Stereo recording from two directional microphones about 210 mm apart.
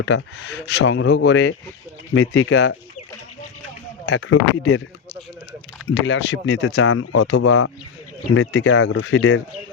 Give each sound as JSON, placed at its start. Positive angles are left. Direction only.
{"t": 0.0, "sound": "speech", "side_deg": 60}
{"t": 2.1, "sound": "speech", "side_deg": 80}
{"t": 4.2, "sound": "speech", "side_deg": 70}
{"t": 5.9, "sound": "speech", "side_deg": 55}
{"t": 6.8, "sound": "speech", "side_deg": 90}
{"t": 8.4, "sound": "speech", "side_deg": 75}